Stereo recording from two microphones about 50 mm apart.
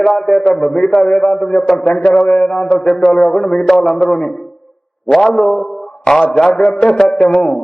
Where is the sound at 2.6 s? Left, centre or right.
Centre.